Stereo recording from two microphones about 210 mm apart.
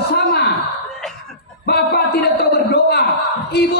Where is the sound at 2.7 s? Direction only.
50° left (ahead or behind).